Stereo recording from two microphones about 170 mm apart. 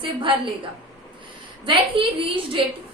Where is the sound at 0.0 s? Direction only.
30° right (ahead or behind).